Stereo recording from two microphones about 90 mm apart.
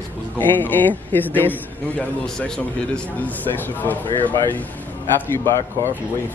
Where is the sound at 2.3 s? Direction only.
10° left (ahead or behind).